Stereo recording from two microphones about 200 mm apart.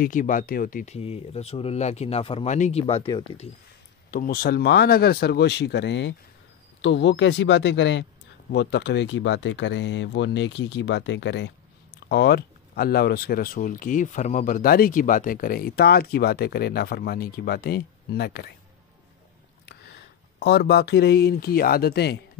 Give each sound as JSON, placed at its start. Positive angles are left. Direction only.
{"t": 0.0, "sound": "speech", "side_deg": 40}
{"t": 4.1, "sound": "speech", "side_deg": 45}
{"t": 19.7, "sound": "speech", "side_deg": 55}